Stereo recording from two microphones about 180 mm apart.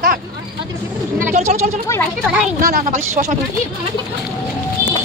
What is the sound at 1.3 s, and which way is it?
Speech, 35° right (ahead or behind).